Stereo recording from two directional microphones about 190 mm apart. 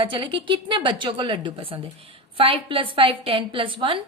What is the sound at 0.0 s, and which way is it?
A woman's voice, 25° right (ahead or behind).